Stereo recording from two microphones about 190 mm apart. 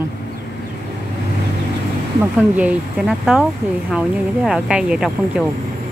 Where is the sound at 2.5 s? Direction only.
5° right (ahead or behind).